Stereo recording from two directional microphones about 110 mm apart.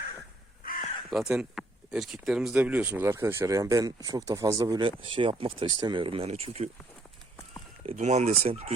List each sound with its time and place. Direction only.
1.1 s speech: 5° right (ahead or behind); by 4.8 s 35° right (ahead or behind)
4.8 s speech: 50° right (ahead or behind); by 6.7 s 65° right (ahead or behind)
7.9 s speech: 90° right; by 8.7 s 65° right (ahead or behind)